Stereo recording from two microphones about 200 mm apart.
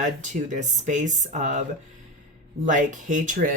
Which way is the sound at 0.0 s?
40° right (ahead or behind).